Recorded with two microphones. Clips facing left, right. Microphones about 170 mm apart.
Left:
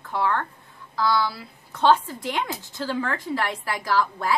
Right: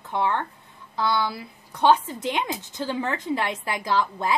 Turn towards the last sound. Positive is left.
turn(degrees=-20)  # may be behind; listen again after turning